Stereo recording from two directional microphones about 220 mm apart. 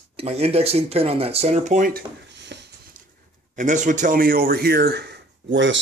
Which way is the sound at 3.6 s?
35° right (ahead or behind).